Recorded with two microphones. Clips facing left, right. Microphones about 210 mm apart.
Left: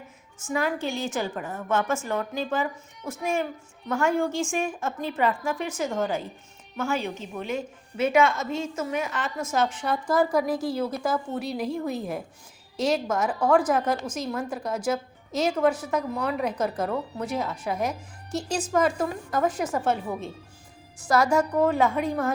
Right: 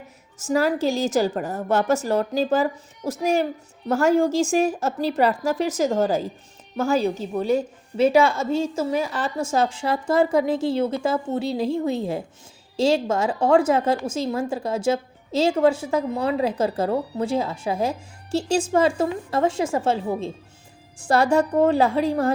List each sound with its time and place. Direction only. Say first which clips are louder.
0.4 s a woman's voice: right 7 dB; 40° right (ahead or behind)
4.3 s a woman's voice: right 7 dB; 90° right
4.5 s a woman's voice: right 7 dB; 40° right (ahead or behind)